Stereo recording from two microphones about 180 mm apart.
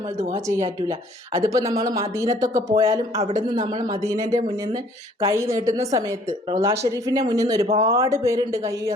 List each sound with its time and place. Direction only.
0.2 s a woman's voice: 15° right (ahead or behind)